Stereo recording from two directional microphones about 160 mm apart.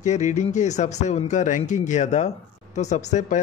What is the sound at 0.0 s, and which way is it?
Speech, 50° left (ahead or behind).